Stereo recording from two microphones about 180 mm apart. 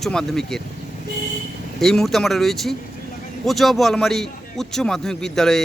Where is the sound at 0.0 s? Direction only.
5° left (ahead or behind).